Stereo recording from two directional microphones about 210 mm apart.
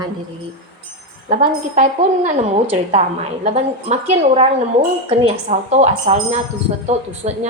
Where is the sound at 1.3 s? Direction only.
35° right (ahead or behind).